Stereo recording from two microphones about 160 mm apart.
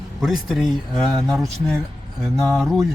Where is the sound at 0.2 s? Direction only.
Centre (ahead or behind).